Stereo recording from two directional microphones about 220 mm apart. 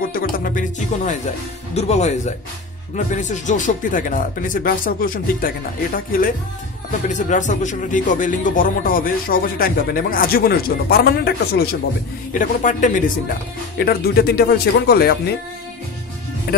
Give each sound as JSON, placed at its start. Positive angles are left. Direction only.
{"t": 0.1, "sound": "speech", "side_deg": 40}